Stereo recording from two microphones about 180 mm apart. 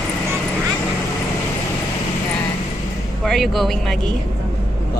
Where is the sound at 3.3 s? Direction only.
Centre (ahead or behind).